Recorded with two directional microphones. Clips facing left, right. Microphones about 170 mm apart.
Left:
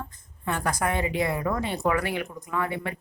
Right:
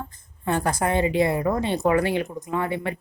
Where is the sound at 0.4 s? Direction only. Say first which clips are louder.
Right 4 dB; 30° right (ahead or behind).